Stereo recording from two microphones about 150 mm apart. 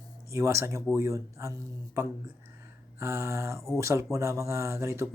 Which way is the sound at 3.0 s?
20° right (ahead or behind).